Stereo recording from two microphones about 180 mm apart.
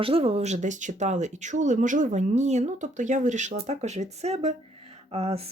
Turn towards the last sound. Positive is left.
turn(degrees=-35)  # may be behind; listen again after turning